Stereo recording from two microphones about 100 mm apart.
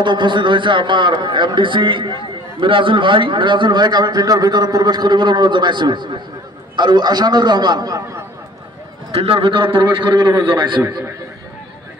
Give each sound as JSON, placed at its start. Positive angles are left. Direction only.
{"t": 0.0, "sound": "a man's voice", "side_deg": -50}
{"t": 9.1, "sound": "a man's voice", "side_deg": -75}